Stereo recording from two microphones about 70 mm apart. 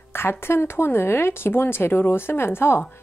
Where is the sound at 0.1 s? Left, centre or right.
Left.